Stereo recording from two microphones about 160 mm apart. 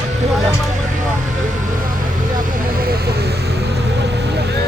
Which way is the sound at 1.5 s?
55° right (ahead or behind).